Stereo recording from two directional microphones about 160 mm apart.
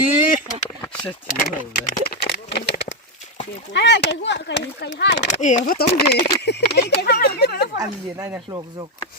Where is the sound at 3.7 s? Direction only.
90° left.